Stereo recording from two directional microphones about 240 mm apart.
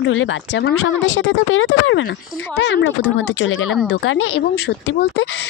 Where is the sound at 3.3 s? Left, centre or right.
Left.